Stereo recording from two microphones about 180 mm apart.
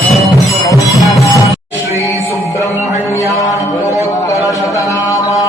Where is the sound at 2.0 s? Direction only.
15° right (ahead or behind).